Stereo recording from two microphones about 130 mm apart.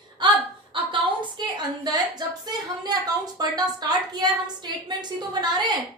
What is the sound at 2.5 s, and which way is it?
A woman's voice, 30° right (ahead or behind).